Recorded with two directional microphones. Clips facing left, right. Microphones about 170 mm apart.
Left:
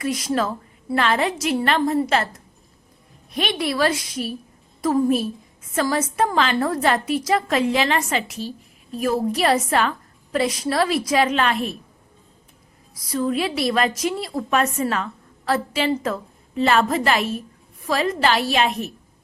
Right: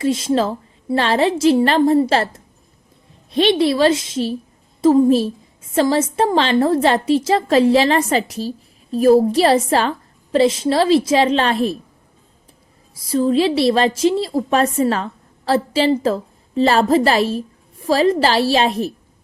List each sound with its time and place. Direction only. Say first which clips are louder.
0.0 s a woman's voice: right 5 dB; 25° right (ahead or behind)
12.9 s a woman's voice: right 6 dB; 30° right (ahead or behind)